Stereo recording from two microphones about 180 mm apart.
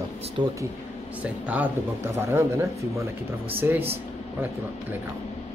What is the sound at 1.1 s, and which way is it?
Speech, 10° right (ahead or behind).